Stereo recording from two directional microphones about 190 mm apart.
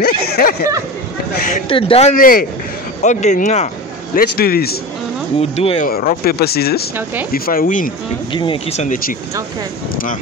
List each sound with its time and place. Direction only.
0.0 s a sound: 55° left (ahead or behind)
1.3 s a man's voice: 45° left (ahead or behind)
1.7 s a man's voice: 30° left (ahead or behind)
4.2 s a man's voice: 55° left (ahead or behind)
5.4 s speech: 30° left (ahead or behind)
5.9 s a man's voice: 50° left (ahead or behind)
8.3 s speech: 25° left (ahead or behind); by 9.1 s 40° left (ahead or behind)